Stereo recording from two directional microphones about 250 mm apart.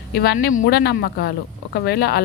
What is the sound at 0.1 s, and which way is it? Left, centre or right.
Speech, left.